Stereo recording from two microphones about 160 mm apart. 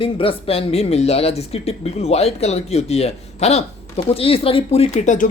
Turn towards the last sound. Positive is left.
turn(degrees=50)  # may be behind; listen again after turning